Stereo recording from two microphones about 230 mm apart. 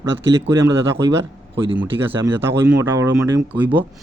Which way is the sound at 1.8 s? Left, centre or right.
Centre.